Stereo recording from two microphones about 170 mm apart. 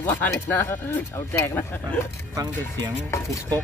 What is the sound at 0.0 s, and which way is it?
Speech, 15° left (ahead or behind).